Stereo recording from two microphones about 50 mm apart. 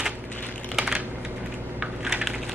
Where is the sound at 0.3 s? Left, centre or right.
Left.